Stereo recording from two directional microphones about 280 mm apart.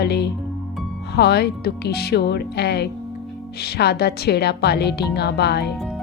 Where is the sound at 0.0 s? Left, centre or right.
Left.